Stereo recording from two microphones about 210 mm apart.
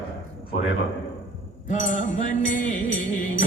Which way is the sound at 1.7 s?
35° left (ahead or behind).